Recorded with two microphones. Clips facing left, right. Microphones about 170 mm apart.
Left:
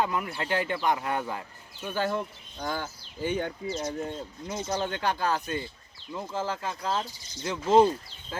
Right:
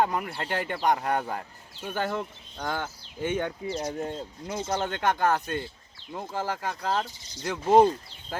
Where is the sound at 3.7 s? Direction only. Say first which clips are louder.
Right 1 dB; 35° right (ahead or behind).